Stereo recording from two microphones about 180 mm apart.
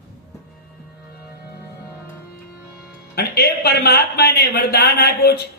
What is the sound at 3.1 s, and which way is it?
Music, 60° left (ahead or behind).